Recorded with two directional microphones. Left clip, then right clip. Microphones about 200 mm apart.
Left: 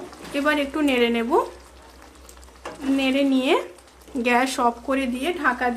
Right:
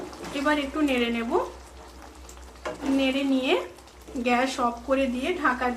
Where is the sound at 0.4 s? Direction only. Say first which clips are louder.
Left 3 dB; 60° left (ahead or behind).